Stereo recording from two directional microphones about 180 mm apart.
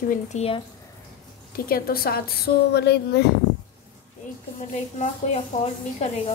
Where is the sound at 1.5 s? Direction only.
55° left (ahead or behind).